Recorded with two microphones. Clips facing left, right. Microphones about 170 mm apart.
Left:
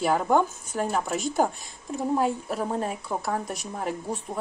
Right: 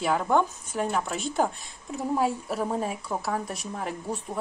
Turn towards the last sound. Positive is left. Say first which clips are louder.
# left 2 dB
turn(degrees=0)  # may be behind; listen again after turning